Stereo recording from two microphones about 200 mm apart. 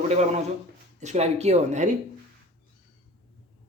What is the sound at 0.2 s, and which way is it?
Speech, 35° right (ahead or behind).